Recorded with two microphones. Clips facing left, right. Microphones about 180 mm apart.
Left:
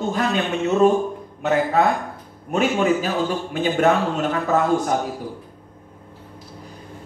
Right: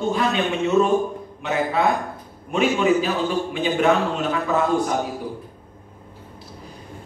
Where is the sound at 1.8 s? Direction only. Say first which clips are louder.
Left 1 dB; 45° left (ahead or behind).